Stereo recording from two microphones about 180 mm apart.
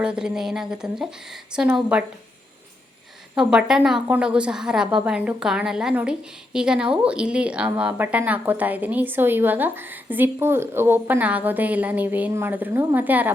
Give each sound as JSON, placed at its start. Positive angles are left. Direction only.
{"t": 0.0, "sound": "a woman's voice", "side_deg": -5}
{"t": 3.3, "sound": "a woman's voice", "side_deg": -5}